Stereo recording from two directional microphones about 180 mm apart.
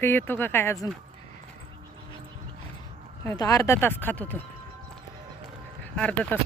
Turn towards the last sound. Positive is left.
turn(degrees=5)  # may be behind; listen again after turning